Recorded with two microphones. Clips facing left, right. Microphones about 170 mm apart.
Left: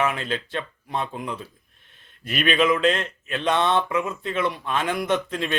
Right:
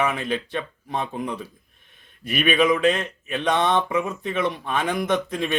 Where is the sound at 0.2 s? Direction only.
15° right (ahead or behind).